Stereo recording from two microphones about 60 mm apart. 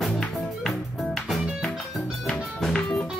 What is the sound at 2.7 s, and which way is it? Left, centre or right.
Music, centre.